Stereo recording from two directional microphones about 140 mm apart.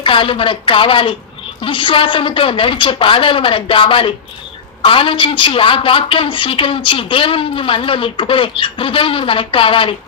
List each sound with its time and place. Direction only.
0.0 s a woman's voice: 40° left (ahead or behind)